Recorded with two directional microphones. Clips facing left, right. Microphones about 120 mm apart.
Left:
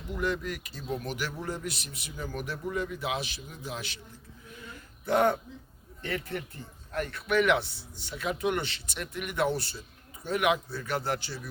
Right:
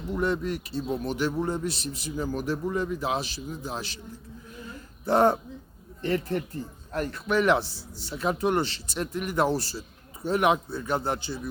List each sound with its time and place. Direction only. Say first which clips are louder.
0.2 s a man's voice: right 4 dB; 30° right (ahead or behind)
4.5 s a sound: right 3 dB; 35° right (ahead or behind)
6.0 s a man's voice: right 7 dB; 35° right (ahead or behind)